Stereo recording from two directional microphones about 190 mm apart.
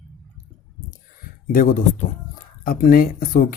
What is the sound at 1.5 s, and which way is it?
Speech, 45° left (ahead or behind).